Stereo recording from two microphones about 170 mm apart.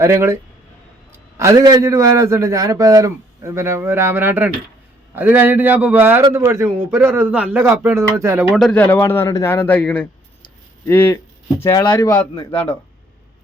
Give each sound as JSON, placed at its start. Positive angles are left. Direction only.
{"t": 0.0, "sound": "a man's voice", "side_deg": -15}
{"t": 1.4, "sound": "a man's voice", "side_deg": -20}
{"t": 8.5, "sound": "a man's voice", "side_deg": 5}
{"t": 11.6, "sound": "speech", "side_deg": 25}